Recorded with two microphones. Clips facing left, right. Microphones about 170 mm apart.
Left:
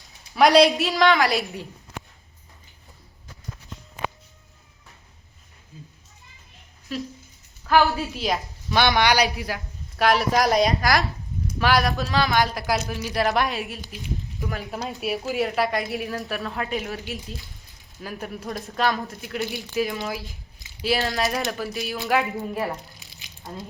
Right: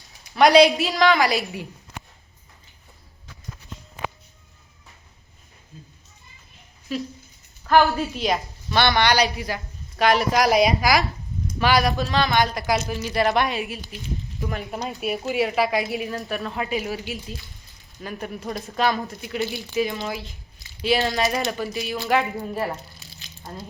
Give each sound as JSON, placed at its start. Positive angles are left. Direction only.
{"t": 0.3, "sound": "a woman's voice", "side_deg": 0}
{"t": 5.7, "sound": "cat", "side_deg": 5}
{"t": 6.9, "sound": "a woman's voice", "side_deg": 0}
{"t": 23.0, "sound": "a sound", "side_deg": 15}